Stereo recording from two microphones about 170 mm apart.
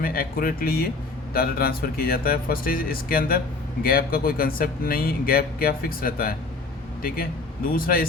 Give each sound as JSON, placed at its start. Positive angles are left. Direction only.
{"t": 0.0, "sound": "speech", "side_deg": 60}
{"t": 7.7, "sound": "speech", "side_deg": 60}